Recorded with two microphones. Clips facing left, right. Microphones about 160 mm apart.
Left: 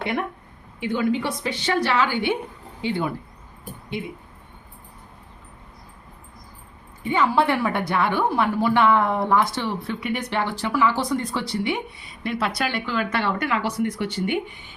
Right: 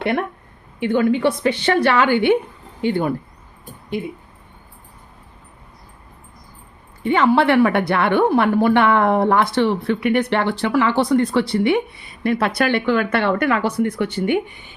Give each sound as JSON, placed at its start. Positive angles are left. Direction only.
{"t": 0.0, "sound": "a woman's voice", "side_deg": -60}
{"t": 7.0, "sound": "a woman's voice", "side_deg": -75}